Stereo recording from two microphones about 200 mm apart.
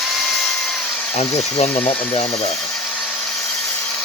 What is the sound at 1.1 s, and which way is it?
Speech, 30° left (ahead or behind).